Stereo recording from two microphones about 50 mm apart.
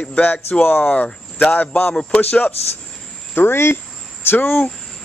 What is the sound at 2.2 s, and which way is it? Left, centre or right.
Speech, left.